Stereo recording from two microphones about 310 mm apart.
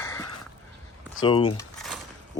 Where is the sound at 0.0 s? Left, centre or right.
Centre.